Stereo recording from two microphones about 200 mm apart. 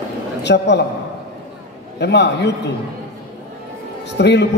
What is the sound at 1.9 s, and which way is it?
Speech, 60° left (ahead or behind).